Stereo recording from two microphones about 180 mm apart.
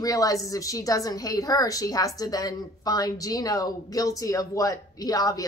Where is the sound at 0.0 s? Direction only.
20° left (ahead or behind).